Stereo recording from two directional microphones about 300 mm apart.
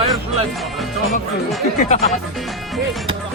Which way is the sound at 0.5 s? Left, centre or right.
Centre.